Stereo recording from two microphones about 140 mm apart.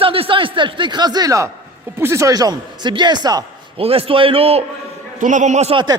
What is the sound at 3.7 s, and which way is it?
Speech, 40° right (ahead or behind).